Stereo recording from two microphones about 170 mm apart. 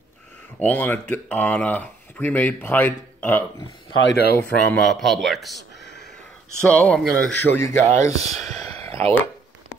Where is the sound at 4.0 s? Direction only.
90° left.